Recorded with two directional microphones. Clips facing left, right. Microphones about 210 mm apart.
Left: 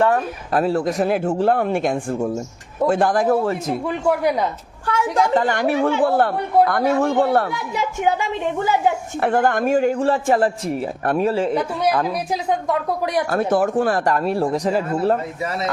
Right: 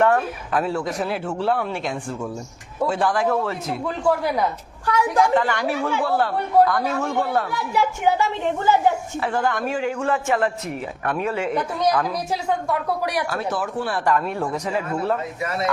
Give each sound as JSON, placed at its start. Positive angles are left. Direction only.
{"t": 0.5, "sound": "speech", "side_deg": 35}
{"t": 1.0, "sound": "a man's voice", "side_deg": 50}
{"t": 2.1, "sound": "a man's voice", "side_deg": 35}
{"t": 4.0, "sound": "speech", "side_deg": 15}
{"t": 4.9, "sound": "a woman's voice", "side_deg": 25}
{"t": 5.5, "sound": "speech", "side_deg": 55}
{"t": 7.7, "sound": "speech", "side_deg": 15}
{"t": 9.2, "sound": "speech", "side_deg": 55}
{"t": 12.3, "sound": "a woman's voice", "side_deg": 20}
{"t": 13.3, "sound": "speech", "side_deg": 50}